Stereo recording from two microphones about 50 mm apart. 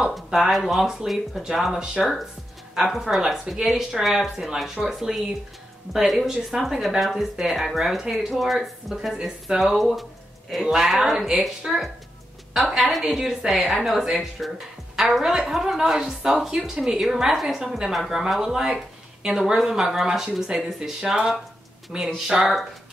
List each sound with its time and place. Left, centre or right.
0.1 s speech: centre